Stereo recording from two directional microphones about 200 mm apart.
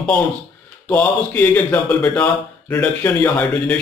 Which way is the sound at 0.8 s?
10° left (ahead or behind).